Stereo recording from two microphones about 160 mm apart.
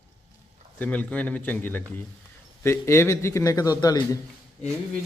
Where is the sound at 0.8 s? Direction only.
10° left (ahead or behind); by 4.2 s 25° left (ahead or behind).